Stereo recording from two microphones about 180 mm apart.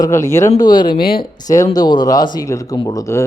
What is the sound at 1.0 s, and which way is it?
Speech, 55° left (ahead or behind).